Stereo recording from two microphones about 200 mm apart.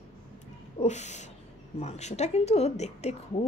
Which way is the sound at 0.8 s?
35° left (ahead or behind).